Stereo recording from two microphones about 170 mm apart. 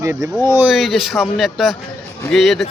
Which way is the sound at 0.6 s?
Centre (ahead or behind).